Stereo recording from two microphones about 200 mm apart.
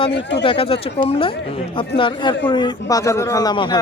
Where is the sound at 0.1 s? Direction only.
60° left (ahead or behind).